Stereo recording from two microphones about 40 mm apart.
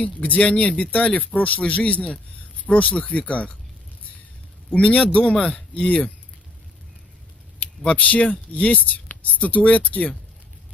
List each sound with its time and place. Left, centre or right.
0.0 s speech: left
4.6 s speech: left
7.8 s speech: left